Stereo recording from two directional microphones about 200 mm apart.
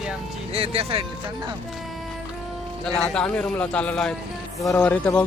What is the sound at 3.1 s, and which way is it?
A man's voice, 5° left (ahead or behind).